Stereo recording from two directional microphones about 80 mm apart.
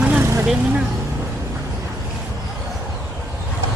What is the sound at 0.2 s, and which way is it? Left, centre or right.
Vehicle, right.